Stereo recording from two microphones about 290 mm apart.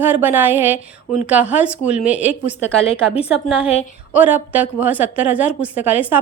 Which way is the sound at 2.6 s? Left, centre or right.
Centre.